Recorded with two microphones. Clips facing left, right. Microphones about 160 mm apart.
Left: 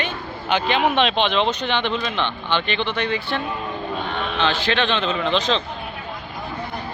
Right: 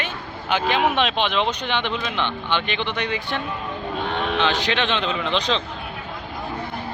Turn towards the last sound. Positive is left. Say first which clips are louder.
# left 2 dB
turn(degrees=-15)  # may be behind; listen again after turning